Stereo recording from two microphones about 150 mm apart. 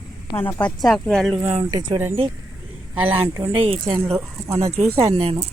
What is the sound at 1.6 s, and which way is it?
Speech, 45° right (ahead or behind).